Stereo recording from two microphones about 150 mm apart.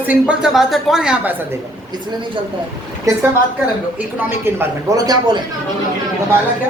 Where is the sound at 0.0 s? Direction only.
10° right (ahead or behind).